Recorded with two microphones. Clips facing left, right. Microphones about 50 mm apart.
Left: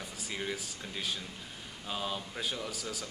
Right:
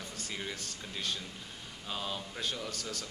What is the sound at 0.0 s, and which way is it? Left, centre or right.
Speech, centre.